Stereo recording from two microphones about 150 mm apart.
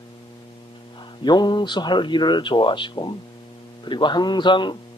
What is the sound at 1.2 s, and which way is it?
A man's voice, 30° left (ahead or behind).